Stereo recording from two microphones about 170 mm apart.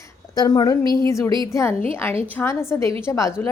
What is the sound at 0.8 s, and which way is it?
Speech, 25° right (ahead or behind).